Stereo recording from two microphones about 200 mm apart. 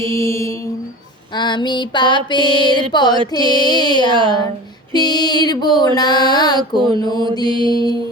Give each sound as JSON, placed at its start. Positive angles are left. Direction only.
{"t": 0.1, "sound": "mantra", "side_deg": 15}